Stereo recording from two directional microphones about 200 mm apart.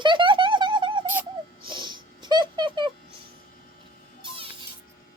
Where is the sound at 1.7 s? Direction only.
25° right (ahead or behind).